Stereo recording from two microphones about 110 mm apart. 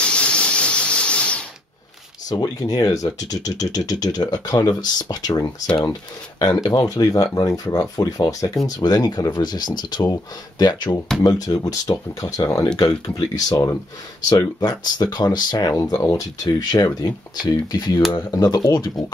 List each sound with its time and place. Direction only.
0.0 s steam: 10° left (ahead or behind)
2.2 s speech: 35° left (ahead or behind)